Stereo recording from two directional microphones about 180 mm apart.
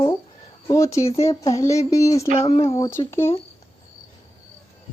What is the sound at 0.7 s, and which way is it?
Speech, 15° left (ahead or behind).